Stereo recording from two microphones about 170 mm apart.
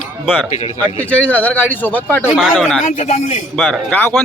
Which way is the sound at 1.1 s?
10° left (ahead or behind).